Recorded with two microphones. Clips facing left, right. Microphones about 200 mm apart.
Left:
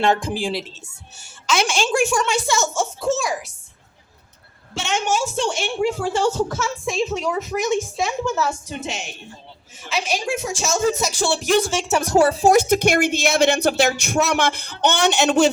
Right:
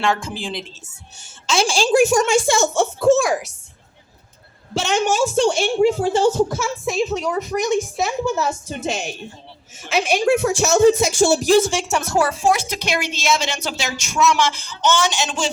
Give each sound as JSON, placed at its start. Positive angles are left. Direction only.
{"t": 0.0, "sound": "a woman's voice", "side_deg": 20}
{"t": 1.5, "sound": "a woman's voice", "side_deg": -30}
{"t": 4.7, "sound": "a woman's voice", "side_deg": -35}
{"t": 5.8, "sound": "a woman's voice", "side_deg": -25}
{"t": 8.4, "sound": "speech", "side_deg": -20}
{"t": 9.7, "sound": "speech", "side_deg": -55}
{"t": 11.6, "sound": "speech", "side_deg": -10}
{"t": 11.9, "sound": "a woman's voice", "side_deg": 10}
{"t": 12.1, "sound": "a woman's voice", "side_deg": 30}